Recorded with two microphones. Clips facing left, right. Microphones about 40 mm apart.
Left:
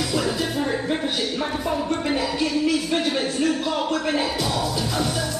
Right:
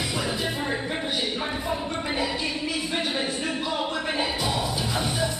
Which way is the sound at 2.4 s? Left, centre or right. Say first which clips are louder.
Left 7 dB; right.